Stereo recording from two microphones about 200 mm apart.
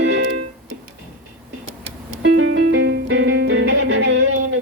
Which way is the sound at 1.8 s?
65° right (ahead or behind).